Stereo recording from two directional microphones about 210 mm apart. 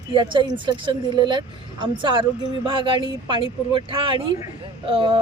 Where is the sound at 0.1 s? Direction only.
25° right (ahead or behind).